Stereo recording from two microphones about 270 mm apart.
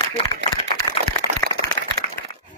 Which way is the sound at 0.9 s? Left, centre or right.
Centre.